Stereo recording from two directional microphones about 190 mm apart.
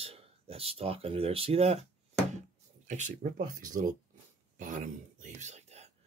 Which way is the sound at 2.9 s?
40° right (ahead or behind).